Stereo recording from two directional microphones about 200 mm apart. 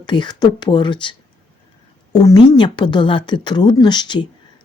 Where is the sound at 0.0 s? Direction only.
20° left (ahead or behind).